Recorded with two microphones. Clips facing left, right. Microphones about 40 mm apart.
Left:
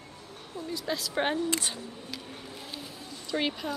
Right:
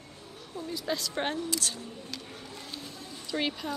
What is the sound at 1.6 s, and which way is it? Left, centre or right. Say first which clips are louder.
Speech: even; centre.